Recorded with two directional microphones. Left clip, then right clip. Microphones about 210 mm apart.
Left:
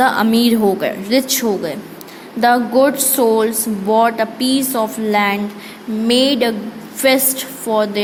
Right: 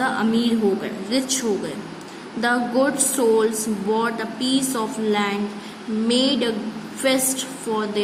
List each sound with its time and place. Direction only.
0.0 s speech: 40° left (ahead or behind)